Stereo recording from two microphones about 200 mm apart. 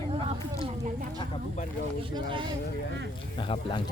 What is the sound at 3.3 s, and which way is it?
Speech, 25° left (ahead or behind).